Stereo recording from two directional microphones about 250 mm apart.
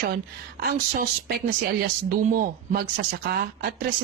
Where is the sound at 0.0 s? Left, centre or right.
Right.